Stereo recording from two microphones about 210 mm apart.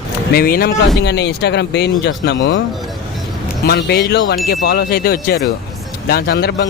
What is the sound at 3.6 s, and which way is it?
Speech, 50° left (ahead or behind).